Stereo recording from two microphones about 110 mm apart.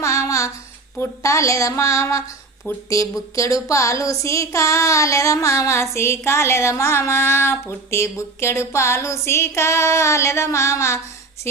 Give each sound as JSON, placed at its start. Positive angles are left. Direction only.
{"t": 0.0, "sound": "child singing", "side_deg": 30}
{"t": 0.9, "sound": "a woman's voice", "side_deg": 25}